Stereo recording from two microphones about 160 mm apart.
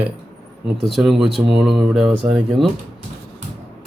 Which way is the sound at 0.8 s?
Centre (ahead or behind).